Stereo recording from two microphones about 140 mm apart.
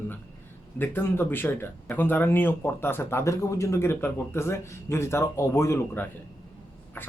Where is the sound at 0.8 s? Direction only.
15° left (ahead or behind).